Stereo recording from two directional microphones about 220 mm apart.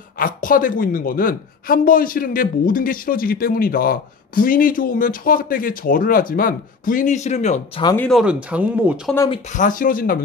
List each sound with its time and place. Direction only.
0.2 s a woman's voice: 40° left (ahead or behind)
7.8 s speech: 10° left (ahead or behind)
8.1 s speech: 5° right (ahead or behind)
9.3 s a woman's voice: 35° left (ahead or behind)